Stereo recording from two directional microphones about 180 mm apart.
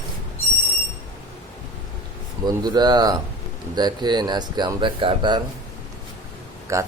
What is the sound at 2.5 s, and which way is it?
Speech, 25° right (ahead or behind).